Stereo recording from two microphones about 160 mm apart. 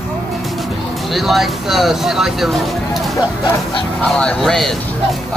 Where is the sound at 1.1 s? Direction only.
Centre (ahead or behind).